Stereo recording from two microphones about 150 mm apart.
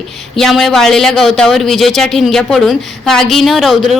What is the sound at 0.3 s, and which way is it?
A woman's voice, centre (ahead or behind).